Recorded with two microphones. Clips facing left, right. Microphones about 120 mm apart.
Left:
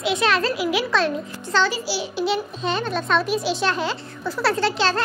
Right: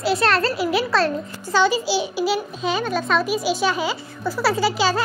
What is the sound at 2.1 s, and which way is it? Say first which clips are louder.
A child's voice: right 1 dB; 5° right (ahead or behind).